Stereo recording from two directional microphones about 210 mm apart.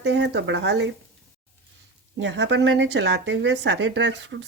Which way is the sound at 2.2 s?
60° right (ahead or behind).